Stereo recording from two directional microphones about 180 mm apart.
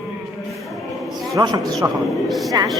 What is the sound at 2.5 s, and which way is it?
Speech, 20° right (ahead or behind).